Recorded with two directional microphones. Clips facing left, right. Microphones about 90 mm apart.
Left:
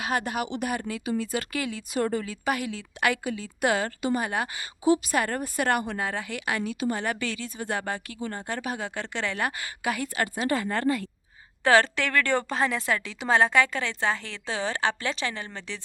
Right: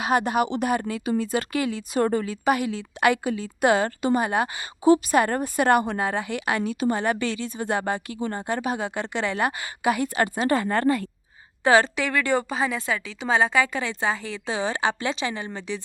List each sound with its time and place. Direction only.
0.0 s a woman's voice: 20° right (ahead or behind); by 11.1 s 40° right (ahead or behind)
11.6 s a woman's voice: 15° right (ahead or behind)